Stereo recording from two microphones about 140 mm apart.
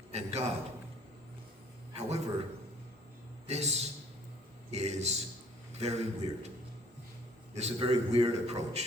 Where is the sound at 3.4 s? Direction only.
50° right (ahead or behind).